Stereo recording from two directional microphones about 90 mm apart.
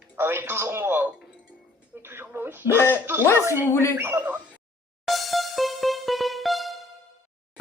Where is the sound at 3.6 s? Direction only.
30° left (ahead or behind).